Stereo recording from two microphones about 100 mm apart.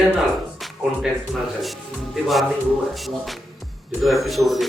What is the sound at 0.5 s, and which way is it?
Speech, centre (ahead or behind).